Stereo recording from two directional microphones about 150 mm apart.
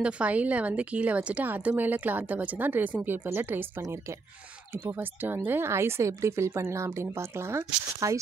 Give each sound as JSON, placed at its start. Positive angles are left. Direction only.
{"t": 0.0, "sound": "speech", "side_deg": -10}